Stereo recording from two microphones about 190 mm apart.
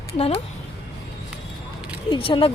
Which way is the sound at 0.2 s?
30° left (ahead or behind).